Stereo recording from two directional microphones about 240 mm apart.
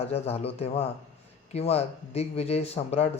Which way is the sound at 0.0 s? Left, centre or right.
Left.